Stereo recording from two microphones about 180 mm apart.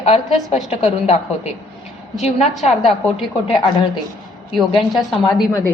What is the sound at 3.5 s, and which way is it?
Speech, 25° left (ahead or behind).